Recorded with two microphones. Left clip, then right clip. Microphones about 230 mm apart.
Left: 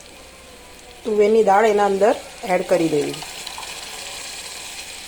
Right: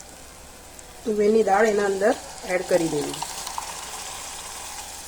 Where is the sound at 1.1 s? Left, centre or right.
Centre.